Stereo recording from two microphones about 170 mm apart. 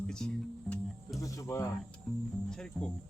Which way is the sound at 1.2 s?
20° left (ahead or behind).